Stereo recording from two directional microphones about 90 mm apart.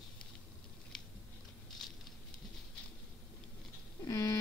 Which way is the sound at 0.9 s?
5° left (ahead or behind).